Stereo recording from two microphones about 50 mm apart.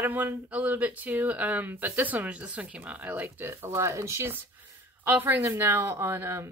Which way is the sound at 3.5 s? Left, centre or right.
Right.